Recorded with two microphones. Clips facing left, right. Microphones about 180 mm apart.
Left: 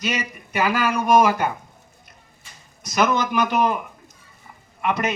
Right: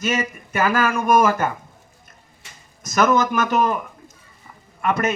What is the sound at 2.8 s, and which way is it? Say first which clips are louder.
Speech: right 3 dB; 45° right (ahead or behind).